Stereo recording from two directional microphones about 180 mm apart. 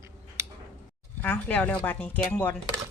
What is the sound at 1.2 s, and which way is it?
Speech, 10° left (ahead or behind).